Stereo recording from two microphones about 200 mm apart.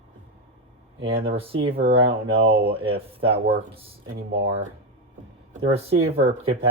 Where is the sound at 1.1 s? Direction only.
30° right (ahead or behind).